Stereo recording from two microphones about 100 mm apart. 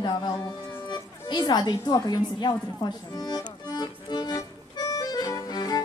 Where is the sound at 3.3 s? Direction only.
40° left (ahead or behind).